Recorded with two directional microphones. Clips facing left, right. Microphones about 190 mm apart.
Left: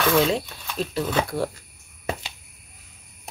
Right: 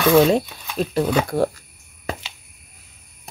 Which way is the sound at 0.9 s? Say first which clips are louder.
Right 5 dB; 45° right (ahead or behind).